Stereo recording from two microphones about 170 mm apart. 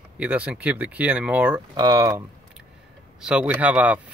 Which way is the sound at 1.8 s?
20° right (ahead or behind).